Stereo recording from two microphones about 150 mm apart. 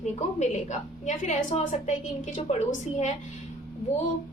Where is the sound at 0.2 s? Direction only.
50° left (ahead or behind).